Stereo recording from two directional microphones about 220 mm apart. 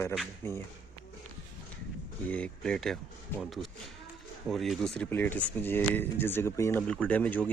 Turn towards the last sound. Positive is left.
turn(degrees=5)  # may be behind; listen again after turning